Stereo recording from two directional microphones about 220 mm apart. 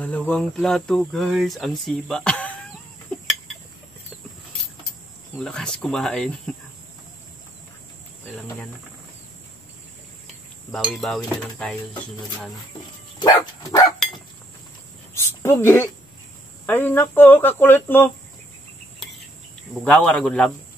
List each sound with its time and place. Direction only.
0.0 s speech: 5° left (ahead or behind)
5.4 s speech: 5° left (ahead or behind)
10.2 s speech: centre (ahead or behind)
13.2 s dog: 15° left (ahead or behind)
15.1 s a sound: 10° left (ahead or behind)
16.6 s speech: 10° left (ahead or behind)
19.7 s speech: centre (ahead or behind)